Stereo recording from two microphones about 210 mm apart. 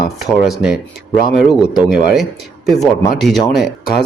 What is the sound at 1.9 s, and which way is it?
A man's voice, 5° right (ahead or behind).